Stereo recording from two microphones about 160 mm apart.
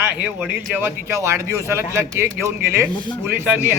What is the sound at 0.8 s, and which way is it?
A man's voice, 15° right (ahead or behind).